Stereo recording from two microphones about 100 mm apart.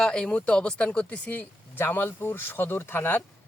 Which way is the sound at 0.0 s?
10° left (ahead or behind).